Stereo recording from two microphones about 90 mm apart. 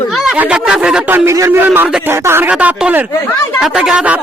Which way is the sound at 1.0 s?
20° right (ahead or behind).